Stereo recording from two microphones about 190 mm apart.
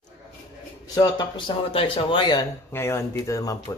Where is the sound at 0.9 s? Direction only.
25° left (ahead or behind).